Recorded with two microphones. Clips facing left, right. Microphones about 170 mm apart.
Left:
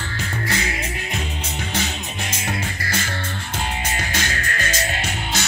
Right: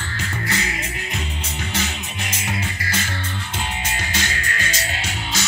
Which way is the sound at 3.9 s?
50° left (ahead or behind).